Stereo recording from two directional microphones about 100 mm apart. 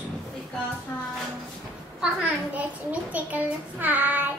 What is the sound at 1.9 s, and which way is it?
A child's voice, 15° right (ahead or behind).